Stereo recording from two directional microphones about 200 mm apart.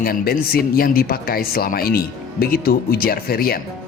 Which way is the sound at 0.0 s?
50° left (ahead or behind).